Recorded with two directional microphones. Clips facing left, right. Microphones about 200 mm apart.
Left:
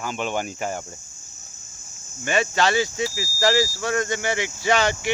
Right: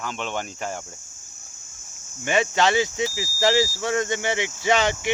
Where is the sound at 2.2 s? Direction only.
20° right (ahead or behind).